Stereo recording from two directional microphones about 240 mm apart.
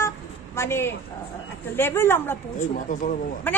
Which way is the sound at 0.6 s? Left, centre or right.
Centre.